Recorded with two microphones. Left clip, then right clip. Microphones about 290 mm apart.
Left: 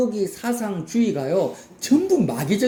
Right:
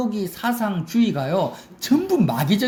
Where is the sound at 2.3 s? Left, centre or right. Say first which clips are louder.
Right 2 dB; right.